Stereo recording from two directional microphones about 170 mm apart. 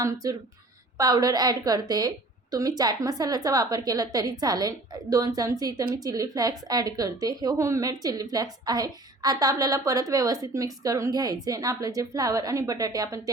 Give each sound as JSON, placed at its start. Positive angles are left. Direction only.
{"t": 0.0, "sound": "a woman's voice", "side_deg": -20}